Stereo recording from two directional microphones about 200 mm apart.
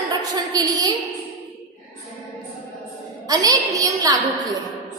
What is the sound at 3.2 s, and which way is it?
Speech, 20° right (ahead or behind).